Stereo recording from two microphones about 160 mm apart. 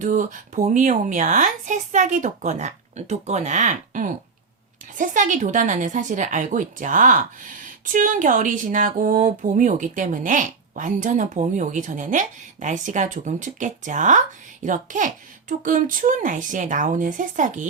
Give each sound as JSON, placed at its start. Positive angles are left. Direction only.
{"t": 0.0, "sound": "a woman's voice", "side_deg": -55}